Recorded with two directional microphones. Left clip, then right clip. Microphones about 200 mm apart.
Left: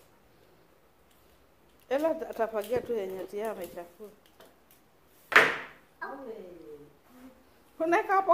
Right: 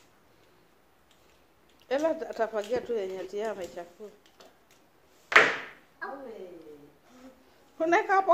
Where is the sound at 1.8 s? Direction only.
Centre (ahead or behind).